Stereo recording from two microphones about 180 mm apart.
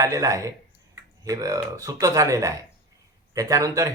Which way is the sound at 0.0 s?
20° right (ahead or behind).